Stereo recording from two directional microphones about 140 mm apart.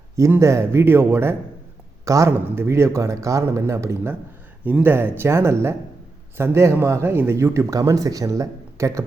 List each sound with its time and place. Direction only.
0.2 s speech: 20° right (ahead or behind)